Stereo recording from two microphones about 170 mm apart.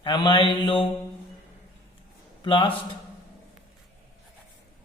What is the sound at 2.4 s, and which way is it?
Speech, 30° left (ahead or behind).